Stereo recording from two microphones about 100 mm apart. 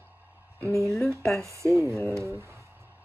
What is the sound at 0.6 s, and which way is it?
Speech, 25° right (ahead or behind).